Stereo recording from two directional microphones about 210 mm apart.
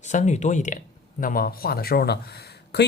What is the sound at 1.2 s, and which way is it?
Speech, 40° left (ahead or behind).